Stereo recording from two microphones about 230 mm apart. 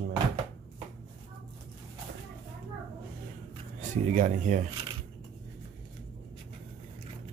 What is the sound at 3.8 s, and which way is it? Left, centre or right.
Speech, right.